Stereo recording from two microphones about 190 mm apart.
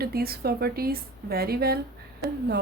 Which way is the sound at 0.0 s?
55° right (ahead or behind).